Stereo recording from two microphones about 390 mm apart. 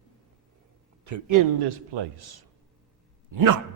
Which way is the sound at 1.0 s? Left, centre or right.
Right.